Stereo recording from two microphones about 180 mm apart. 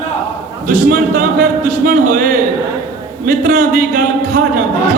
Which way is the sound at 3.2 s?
45° right (ahead or behind).